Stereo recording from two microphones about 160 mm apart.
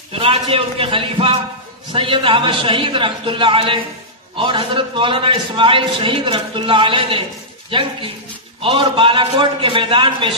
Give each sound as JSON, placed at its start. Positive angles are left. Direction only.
{"t": 0.2, "sound": "a man's voice", "side_deg": -35}
{"t": 8.6, "sound": "a man's voice", "side_deg": -30}